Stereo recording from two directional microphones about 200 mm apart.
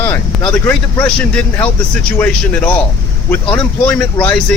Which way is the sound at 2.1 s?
10° left (ahead or behind).